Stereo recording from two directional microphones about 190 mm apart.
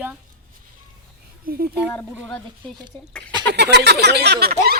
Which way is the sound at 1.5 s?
50° right (ahead or behind).